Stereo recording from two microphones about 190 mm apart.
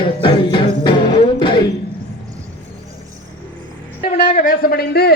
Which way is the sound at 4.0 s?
45° left (ahead or behind).